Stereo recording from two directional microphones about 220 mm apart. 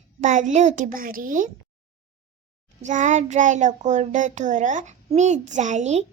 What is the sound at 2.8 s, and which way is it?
A child's voice, 35° right (ahead or behind).